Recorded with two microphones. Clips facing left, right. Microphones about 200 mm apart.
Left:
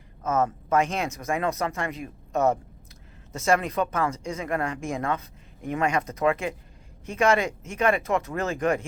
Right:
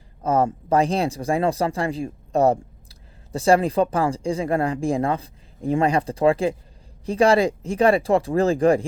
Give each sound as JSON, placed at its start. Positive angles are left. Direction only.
{"t": 0.2, "sound": "speech", "side_deg": -35}